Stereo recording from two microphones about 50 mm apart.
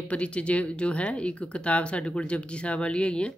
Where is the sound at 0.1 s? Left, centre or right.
Left.